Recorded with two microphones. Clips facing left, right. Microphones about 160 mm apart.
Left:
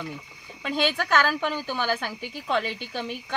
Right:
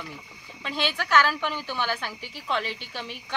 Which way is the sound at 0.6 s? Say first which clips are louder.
Left 4 dB; 50° left (ahead or behind).